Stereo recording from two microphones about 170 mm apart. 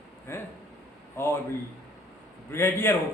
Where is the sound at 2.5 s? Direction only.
15° left (ahead or behind).